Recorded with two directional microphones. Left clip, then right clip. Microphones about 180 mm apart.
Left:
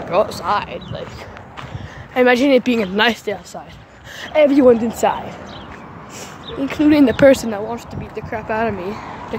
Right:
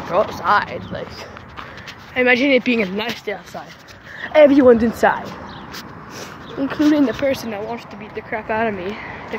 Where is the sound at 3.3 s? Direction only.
35° left (ahead or behind).